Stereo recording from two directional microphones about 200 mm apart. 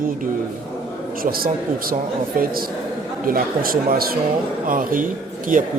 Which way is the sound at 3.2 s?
45° right (ahead or behind).